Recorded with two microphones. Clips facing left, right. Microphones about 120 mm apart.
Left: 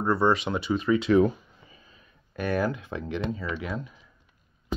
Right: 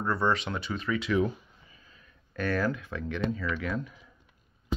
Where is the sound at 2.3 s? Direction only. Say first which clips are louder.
Left 2 dB; 15° left (ahead or behind).